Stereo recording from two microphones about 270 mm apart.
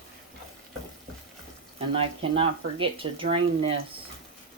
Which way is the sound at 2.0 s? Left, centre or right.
Centre.